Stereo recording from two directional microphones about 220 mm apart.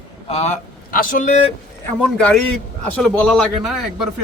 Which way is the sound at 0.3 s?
30° left (ahead or behind).